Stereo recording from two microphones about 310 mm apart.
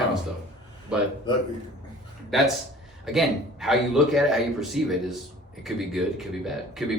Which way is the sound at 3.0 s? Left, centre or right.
Centre.